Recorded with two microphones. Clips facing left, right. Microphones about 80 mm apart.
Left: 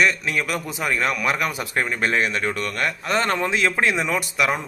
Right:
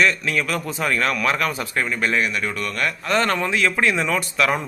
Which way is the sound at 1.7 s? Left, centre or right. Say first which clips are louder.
Left 2 dB; left.